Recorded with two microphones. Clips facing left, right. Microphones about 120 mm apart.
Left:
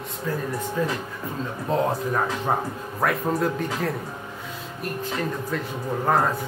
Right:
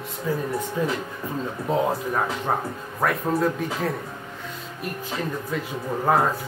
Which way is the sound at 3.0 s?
Centre (ahead or behind).